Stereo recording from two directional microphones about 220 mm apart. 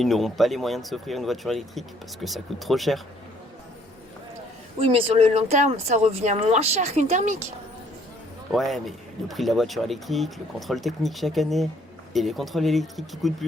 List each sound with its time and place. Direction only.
0.0 s speech: centre (ahead or behind)
4.8 s speech: 25° right (ahead or behind)
8.5 s speech: centre (ahead or behind)